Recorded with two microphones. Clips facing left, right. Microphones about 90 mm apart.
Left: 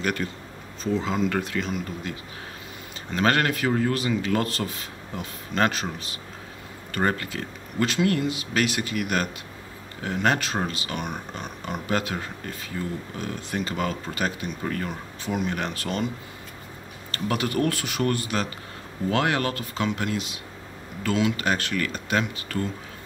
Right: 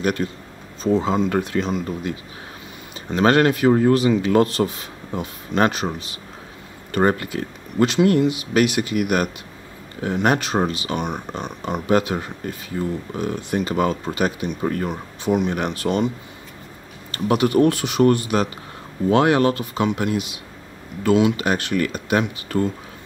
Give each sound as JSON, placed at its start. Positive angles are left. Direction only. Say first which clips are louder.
{"t": 0.0, "sound": "speech", "louder": "right 5 dB", "side_deg": -25}
{"t": 3.2, "sound": "speech", "louder": "right 7 dB", "side_deg": -20}
{"t": 17.1, "sound": "speech", "louder": "right 8 dB", "side_deg": -20}